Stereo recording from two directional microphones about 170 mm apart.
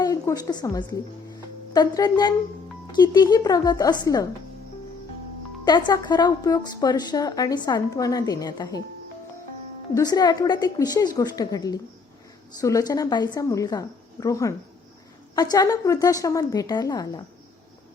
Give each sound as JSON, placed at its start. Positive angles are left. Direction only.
{"t": 0.0, "sound": "a woman's voice", "side_deg": 20}
{"t": 5.6, "sound": "a woman's voice", "side_deg": 25}
{"t": 9.9, "sound": "a woman's voice", "side_deg": 20}